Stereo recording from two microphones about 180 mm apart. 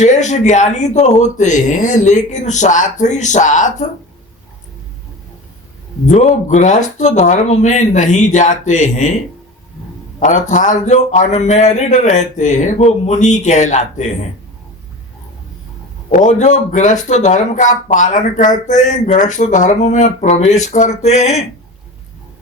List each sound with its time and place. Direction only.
0.0 s speech: 40° left (ahead or behind)
6.1 s speech: 40° left (ahead or behind)
10.2 s speech: 45° left (ahead or behind)
16.1 s speech: 45° left (ahead or behind)